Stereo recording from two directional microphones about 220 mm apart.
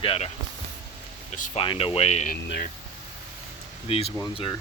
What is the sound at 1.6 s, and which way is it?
Speech, 25° left (ahead or behind).